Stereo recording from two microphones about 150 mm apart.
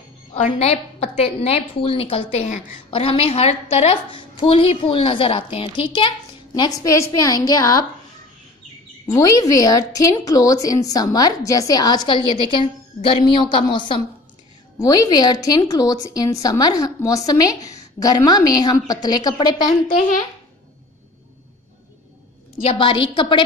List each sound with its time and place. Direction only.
0.3 s a woman's voice: 45° left (ahead or behind); by 7.8 s 25° left (ahead or behind)
9.0 s a woman's voice: 25° left (ahead or behind)
22.8 s a woman's voice: 35° left (ahead or behind)